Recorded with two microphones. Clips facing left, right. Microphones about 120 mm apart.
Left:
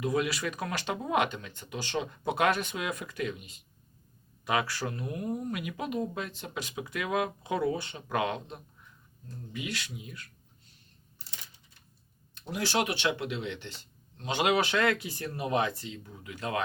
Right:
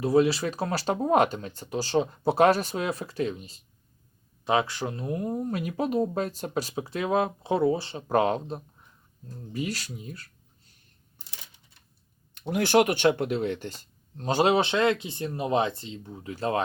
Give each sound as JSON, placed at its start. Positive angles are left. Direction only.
{"t": 0.0, "sound": "speech", "side_deg": -30}
{"t": 12.4, "sound": "speech", "side_deg": -55}